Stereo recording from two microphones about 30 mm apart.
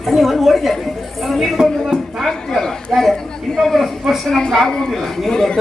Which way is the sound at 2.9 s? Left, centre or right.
Centre.